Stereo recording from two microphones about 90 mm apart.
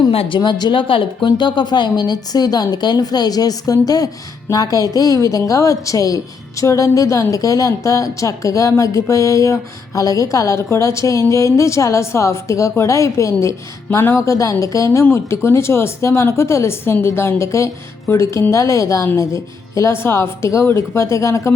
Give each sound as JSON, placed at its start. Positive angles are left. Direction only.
{"t": 0.0, "sound": "speech", "side_deg": 80}
{"t": 0.3, "sound": "a woman's voice", "side_deg": 55}